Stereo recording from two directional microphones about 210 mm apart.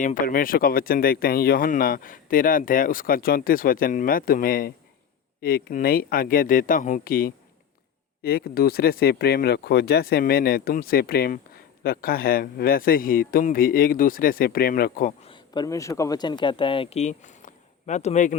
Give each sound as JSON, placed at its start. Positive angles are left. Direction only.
{"t": 0.0, "sound": "speech", "side_deg": 40}
{"t": 15.2, "sound": "speech", "side_deg": 20}